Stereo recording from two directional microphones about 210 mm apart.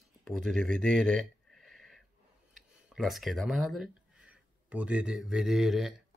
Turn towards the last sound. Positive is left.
turn(degrees=0)  # may be behind; listen again after turning